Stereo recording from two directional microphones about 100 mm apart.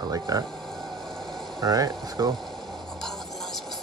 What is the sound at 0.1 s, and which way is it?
Speech, 35° right (ahead or behind).